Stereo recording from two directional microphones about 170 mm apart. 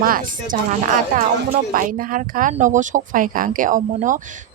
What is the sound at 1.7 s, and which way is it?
Speech, 55° right (ahead or behind).